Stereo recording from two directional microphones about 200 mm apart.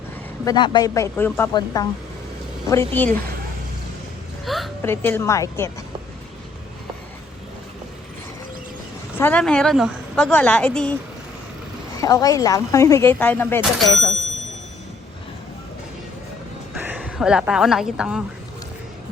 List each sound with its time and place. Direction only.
0.4 s speech: 20° left (ahead or behind)
4.4 s speech: centre (ahead or behind)
4.8 s speech: 10° left (ahead or behind)
9.1 s speech: 10° left (ahead or behind)
11.9 s speech: 15° left (ahead or behind); by 14.1 s centre (ahead or behind)
16.7 s a woman's voice: 5° right (ahead or behind)